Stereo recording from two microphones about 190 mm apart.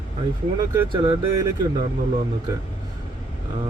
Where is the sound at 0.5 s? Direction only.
20° right (ahead or behind).